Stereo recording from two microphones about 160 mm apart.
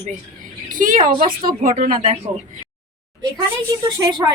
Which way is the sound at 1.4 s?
60° right (ahead or behind).